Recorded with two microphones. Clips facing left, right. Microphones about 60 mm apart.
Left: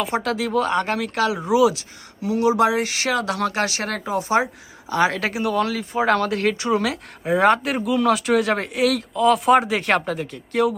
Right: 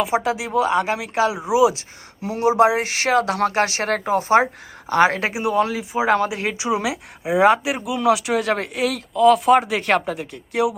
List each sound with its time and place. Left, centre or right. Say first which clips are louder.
0.0 s speech: right 2 dB; centre; by 5.2 s right
5.2 s speech: right 2 dB; right
5.8 s speech: right 1 dB; centre